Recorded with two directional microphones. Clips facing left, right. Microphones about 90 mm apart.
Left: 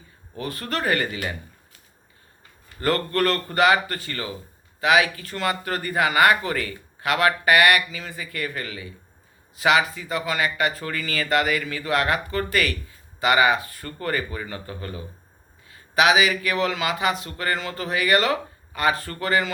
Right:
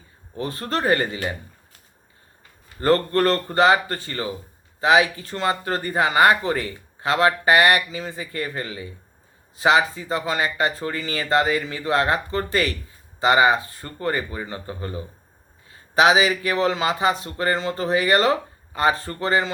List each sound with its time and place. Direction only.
0.3 s speech: 30° right (ahead or behind)
2.8 s speech: 30° right (ahead or behind)